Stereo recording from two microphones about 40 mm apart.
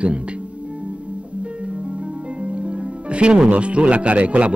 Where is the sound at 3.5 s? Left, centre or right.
Right.